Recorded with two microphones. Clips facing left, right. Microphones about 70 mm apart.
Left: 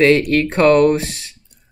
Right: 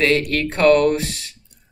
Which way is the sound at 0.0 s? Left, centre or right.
Left.